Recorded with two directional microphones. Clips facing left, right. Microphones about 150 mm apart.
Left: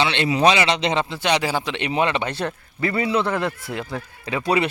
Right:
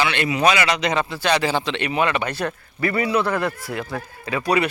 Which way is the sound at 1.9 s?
25° left (ahead or behind).